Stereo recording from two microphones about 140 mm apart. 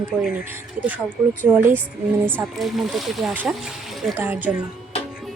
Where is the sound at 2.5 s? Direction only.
Centre (ahead or behind).